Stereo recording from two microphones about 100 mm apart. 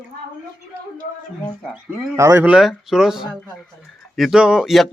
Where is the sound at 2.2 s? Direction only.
30° right (ahead or behind).